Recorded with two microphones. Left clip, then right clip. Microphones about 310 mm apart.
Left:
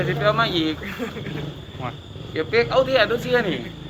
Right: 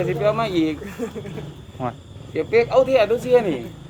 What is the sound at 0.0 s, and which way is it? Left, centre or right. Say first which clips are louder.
Speech: even; right.